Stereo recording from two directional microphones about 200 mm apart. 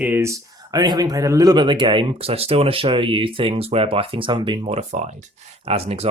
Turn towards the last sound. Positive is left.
turn(degrees=-30)  # may be behind; listen again after turning